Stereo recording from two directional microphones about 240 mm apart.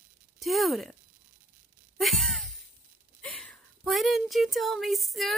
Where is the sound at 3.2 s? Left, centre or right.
Centre.